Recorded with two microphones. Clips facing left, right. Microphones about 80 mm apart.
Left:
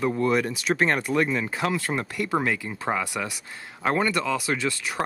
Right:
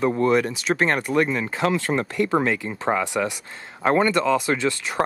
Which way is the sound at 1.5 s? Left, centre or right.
Right.